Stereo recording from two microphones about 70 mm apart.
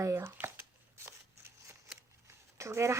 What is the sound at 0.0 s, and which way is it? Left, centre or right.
Speech, right.